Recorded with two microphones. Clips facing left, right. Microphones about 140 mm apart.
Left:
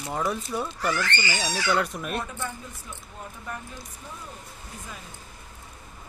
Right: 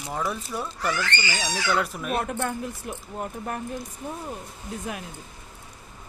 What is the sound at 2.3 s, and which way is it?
Speech, 70° right (ahead or behind).